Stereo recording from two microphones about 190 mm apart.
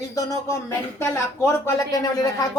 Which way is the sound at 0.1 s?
15° left (ahead or behind).